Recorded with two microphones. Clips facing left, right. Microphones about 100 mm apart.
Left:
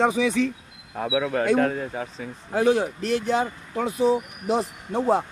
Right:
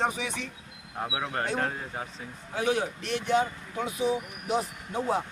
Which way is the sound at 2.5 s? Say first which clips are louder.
Left 7 dB; 35° left (ahead or behind).